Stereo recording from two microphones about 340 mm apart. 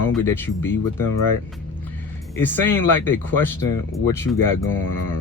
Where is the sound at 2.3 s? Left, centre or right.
Centre.